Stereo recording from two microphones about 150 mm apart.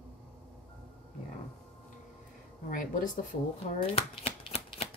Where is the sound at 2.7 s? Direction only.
60° left (ahead or behind).